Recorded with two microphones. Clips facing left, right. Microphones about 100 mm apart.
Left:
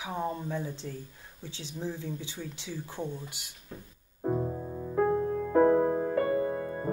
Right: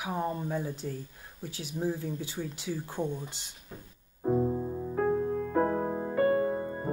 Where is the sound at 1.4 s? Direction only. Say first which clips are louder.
Right 3 dB; 25° left (ahead or behind).